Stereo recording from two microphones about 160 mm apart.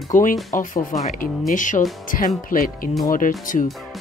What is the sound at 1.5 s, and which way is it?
Speech, 55° left (ahead or behind).